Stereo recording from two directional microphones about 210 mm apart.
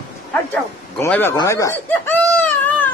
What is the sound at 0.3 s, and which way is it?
Snicker, 10° left (ahead or behind).